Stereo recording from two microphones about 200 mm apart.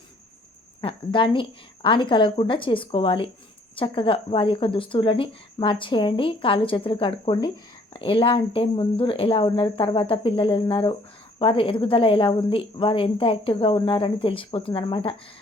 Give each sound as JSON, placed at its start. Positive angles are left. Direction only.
{"t": 0.8, "sound": "speech", "side_deg": 25}